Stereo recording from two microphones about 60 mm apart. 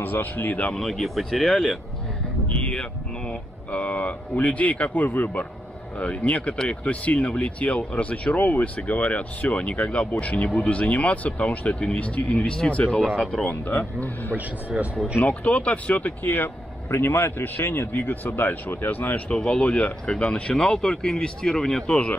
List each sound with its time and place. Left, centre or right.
0.0 s speech: left
0.7 s speech: centre
2.5 s speech: centre
13.5 s speech: left
14.3 s speech: right
15.2 s speech: left
20.5 s speech: centre